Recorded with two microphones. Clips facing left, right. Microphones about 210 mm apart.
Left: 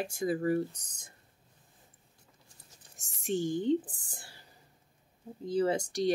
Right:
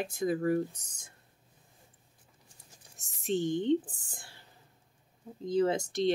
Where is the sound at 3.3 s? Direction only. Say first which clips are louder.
Right 1 dB; 10° left (ahead or behind).